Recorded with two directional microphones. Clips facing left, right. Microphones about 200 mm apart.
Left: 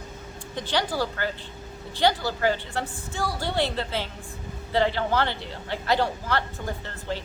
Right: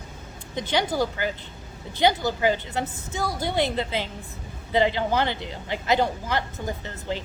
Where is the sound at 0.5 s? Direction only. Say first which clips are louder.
Right 2 dB; 20° right (ahead or behind).